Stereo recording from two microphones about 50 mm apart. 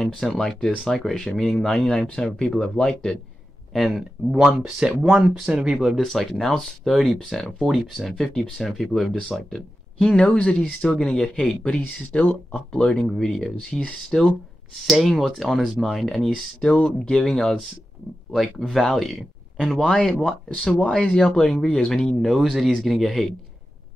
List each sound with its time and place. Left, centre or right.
0.0 s speech: centre
3.7 s speech: centre
5.7 s speech: centre
8.1 s speech: centre
12.1 s speech: left
12.5 s speech: centre
12.9 s speech: centre
16.7 s speech: left
17.1 s speech: centre
18.7 s speech: centre
22.3 s speech: centre